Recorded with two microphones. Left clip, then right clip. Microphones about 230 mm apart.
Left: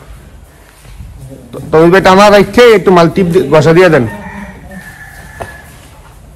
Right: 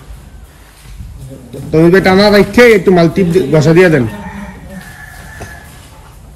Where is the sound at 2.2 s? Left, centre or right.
Left.